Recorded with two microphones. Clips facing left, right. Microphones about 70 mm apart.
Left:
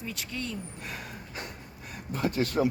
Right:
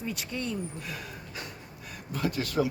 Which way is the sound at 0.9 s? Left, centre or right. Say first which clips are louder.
Even; left.